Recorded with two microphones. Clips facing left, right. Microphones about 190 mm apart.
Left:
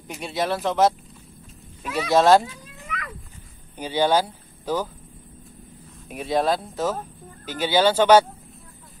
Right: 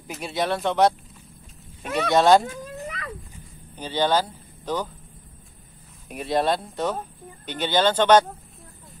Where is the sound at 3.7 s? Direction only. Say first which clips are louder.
Left 2 dB; 10° left (ahead or behind).